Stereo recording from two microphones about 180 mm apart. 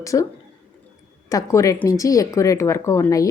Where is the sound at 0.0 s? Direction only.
20° left (ahead or behind).